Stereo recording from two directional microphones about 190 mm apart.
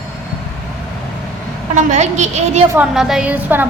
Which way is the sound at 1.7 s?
40° right (ahead or behind).